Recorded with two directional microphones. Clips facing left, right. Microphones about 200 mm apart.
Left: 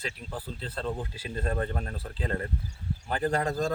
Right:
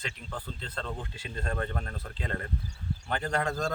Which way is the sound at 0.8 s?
5° left (ahead or behind).